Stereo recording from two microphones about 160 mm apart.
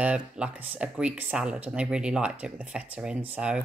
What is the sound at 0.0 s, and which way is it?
Speech, 10° right (ahead or behind).